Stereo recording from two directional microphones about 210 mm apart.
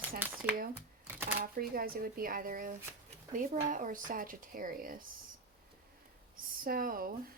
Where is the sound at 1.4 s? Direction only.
45° right (ahead or behind).